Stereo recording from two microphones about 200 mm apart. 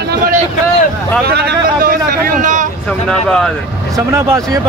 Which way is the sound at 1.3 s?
55° right (ahead or behind).